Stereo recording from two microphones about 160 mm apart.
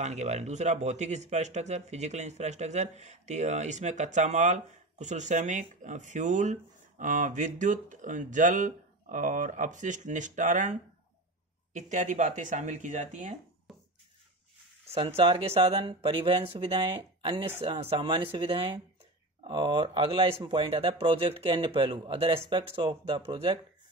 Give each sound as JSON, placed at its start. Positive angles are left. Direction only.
{"t": 0.0, "sound": "speech", "side_deg": -45}
{"t": 13.7, "sound": "a sound", "side_deg": 0}
{"t": 15.0, "sound": "speech", "side_deg": -35}